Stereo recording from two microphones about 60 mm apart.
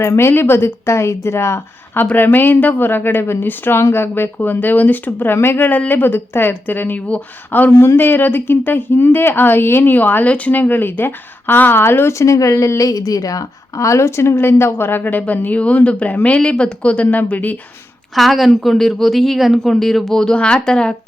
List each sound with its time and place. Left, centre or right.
0.0 s speech: left
2.0 s speech: left
7.8 s speech: left
12.2 s a woman's voice: left
13.1 s a woman's voice: left
18.1 s a woman's voice: centre